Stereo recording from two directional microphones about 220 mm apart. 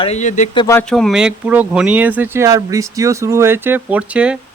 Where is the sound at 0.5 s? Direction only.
20° left (ahead or behind).